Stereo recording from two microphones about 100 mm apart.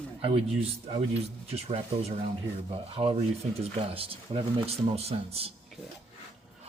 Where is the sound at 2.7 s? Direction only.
70° right (ahead or behind); by 5.5 s 85° right.